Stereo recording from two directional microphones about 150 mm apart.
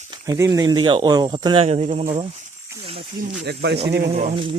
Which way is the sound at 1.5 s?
40° right (ahead or behind).